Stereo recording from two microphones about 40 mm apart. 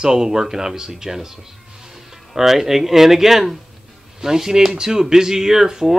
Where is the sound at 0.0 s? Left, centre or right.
Centre.